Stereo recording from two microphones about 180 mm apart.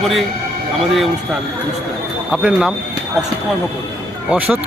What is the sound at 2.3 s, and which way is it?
Speech, 5° right (ahead or behind).